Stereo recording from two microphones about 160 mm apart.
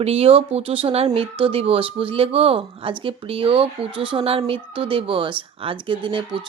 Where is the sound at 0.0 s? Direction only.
40° right (ahead or behind).